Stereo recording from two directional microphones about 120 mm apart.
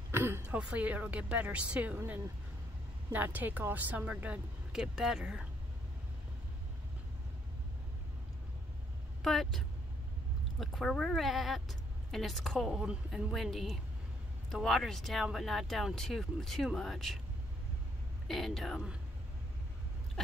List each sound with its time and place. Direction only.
0.1 s a sound: 20° right (ahead or behind)
0.6 s a woman's voice: 10° right (ahead or behind)
9.2 s speech: centre (ahead or behind)
18.3 s speech: centre (ahead or behind)